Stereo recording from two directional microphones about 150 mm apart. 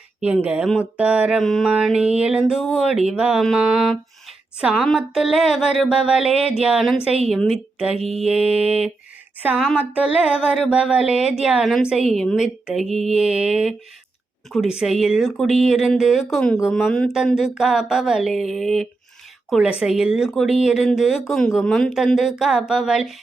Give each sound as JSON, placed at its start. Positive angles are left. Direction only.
{"t": 0.2, "sound": "speech", "side_deg": -5}
{"t": 16.8, "sound": "a woman's voice", "side_deg": 5}